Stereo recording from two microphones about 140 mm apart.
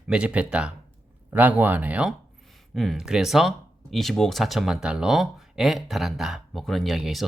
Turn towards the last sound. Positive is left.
turn(degrees=0)  # may be behind; listen again after turning